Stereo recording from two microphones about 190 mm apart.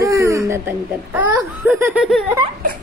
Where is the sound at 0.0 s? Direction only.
15° right (ahead or behind).